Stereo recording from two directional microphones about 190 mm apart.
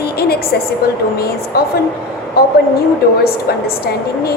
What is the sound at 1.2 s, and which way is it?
Speech, 55° left (ahead or behind).